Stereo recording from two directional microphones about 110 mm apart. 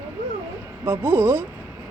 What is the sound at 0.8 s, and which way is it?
Speech, 20° right (ahead or behind).